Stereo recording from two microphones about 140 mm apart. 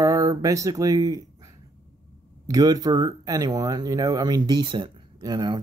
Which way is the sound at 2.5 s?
25° right (ahead or behind).